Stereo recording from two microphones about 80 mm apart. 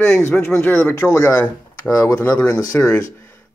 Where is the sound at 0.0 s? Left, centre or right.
Left.